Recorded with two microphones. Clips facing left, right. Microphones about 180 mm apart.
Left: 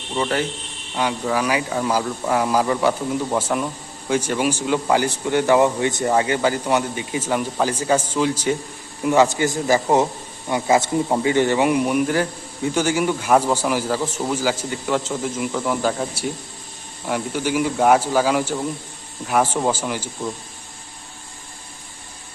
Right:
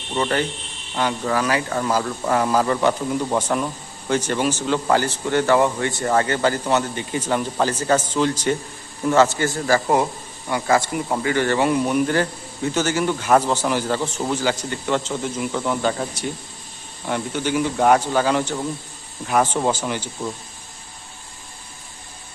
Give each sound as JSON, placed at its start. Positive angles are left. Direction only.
{"t": 0.1, "sound": "speech", "side_deg": 5}